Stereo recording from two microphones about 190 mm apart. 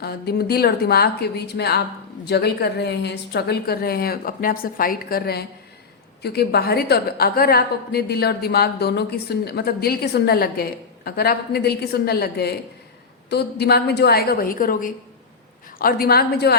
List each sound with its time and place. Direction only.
0.0 s a woman's voice: 55° left (ahead or behind)